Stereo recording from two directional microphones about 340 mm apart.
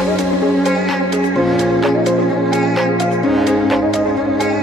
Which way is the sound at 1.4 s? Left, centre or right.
Centre.